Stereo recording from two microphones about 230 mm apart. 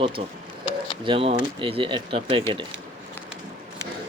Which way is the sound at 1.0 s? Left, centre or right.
Right.